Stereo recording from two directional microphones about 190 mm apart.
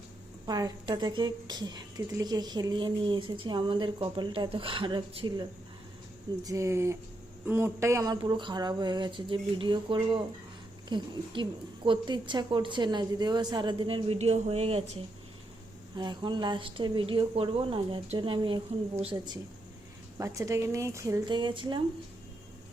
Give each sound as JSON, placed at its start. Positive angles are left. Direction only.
{"t": 0.4, "sound": "a woman's voice", "side_deg": -20}
{"t": 16.0, "sound": "a woman's voice", "side_deg": -25}